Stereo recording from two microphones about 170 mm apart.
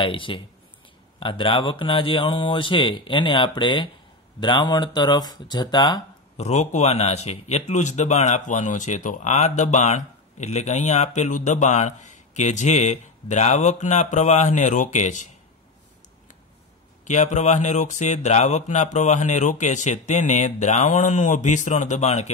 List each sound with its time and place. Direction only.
0.0 s speech: 30° left (ahead or behind)
6.3 s speech: 40° left (ahead or behind)
17.0 s speech: 45° left (ahead or behind)